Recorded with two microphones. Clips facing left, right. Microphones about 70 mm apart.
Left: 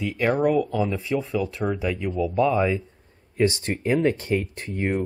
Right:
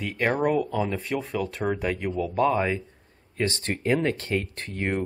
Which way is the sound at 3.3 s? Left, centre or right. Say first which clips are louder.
Left 5 dB; centre.